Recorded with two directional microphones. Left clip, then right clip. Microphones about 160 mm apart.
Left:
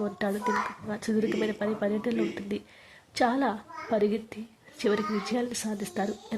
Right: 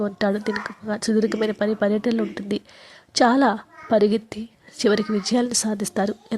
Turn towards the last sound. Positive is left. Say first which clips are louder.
# right 7 dB
turn(degrees=-35)  # may be behind; listen again after turning